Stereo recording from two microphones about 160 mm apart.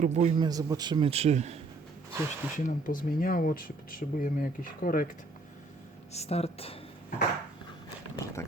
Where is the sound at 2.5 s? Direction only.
55° left (ahead or behind).